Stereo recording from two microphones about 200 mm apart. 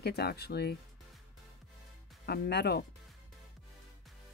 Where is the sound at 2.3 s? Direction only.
55° left (ahead or behind).